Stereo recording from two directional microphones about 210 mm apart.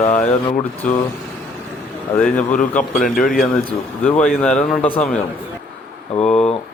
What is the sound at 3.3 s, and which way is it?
Speech, 5° left (ahead or behind).